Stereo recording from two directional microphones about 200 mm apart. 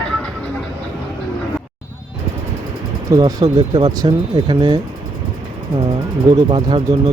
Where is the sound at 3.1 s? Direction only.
20° right (ahead or behind).